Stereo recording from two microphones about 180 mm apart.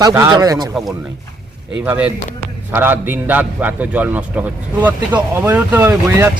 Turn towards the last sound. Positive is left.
turn(degrees=-10)  # may be behind; listen again after turning